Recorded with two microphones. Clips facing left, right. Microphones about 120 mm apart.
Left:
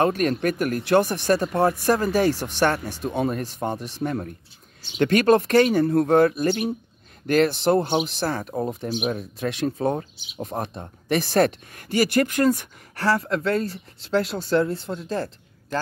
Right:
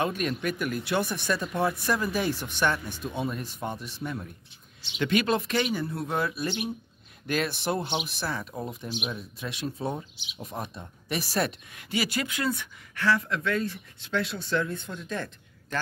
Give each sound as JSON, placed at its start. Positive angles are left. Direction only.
{"t": 0.0, "sound": "speech", "side_deg": 45}